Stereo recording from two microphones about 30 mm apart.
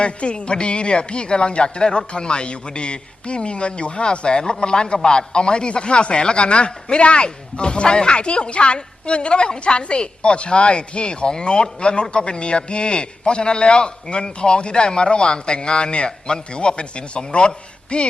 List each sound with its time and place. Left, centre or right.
0.0 s speech: left